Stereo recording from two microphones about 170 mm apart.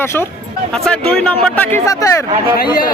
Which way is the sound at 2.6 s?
55° left (ahead or behind).